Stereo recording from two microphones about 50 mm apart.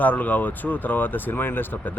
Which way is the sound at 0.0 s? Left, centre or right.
Left.